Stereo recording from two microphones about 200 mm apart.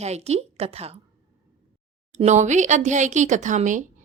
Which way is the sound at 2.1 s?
35° right (ahead or behind).